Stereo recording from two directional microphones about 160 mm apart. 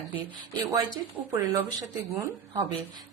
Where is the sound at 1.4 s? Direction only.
20° right (ahead or behind).